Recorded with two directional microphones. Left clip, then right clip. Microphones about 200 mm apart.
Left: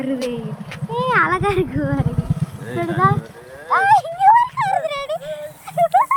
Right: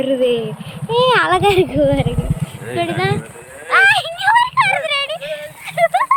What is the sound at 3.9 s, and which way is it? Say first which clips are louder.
Vehicle: left 2 dB; 20° right (ahead or behind).